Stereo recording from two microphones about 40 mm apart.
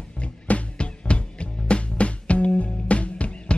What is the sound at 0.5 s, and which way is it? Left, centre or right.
Music, left.